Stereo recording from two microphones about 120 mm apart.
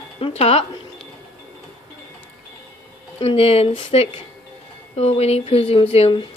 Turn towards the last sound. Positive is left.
turn(degrees=55)  # may be behind; listen again after turning